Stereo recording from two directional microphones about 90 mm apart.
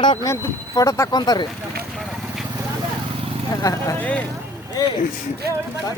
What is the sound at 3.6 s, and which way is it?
Speech, 35° left (ahead or behind).